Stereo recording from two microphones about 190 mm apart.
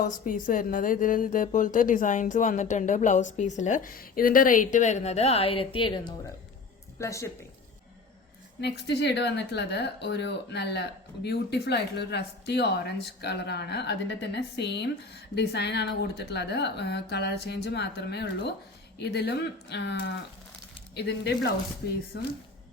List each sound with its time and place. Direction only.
0.0 s a woman's voice: 45° left (ahead or behind); by 6.1 s 25° left (ahead or behind)
7.0 s speech: 15° left (ahead or behind)
8.6 s speech: 60° left (ahead or behind)